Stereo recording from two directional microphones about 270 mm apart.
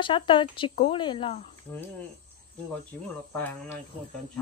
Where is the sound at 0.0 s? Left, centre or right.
Centre.